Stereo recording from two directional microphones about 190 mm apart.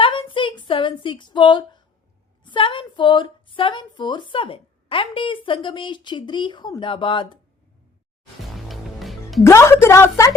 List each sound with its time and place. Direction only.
0.0 s a sound: 25° left (ahead or behind)
2.4 s a woman's voice: 25° left (ahead or behind)
8.5 s music: centre (ahead or behind)
9.4 s a woman's voice: 15° left (ahead or behind)